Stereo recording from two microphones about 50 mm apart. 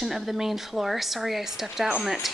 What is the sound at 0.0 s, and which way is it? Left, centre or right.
A woman's voice, centre.